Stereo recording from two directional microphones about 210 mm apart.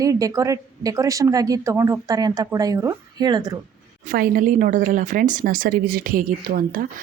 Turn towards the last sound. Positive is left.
turn(degrees=-40)  # may be behind; listen again after turning